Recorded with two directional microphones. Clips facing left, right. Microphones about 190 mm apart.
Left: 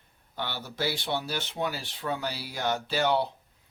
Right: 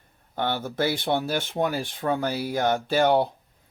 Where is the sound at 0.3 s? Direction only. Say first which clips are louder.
Right 8 dB; 50° right (ahead or behind).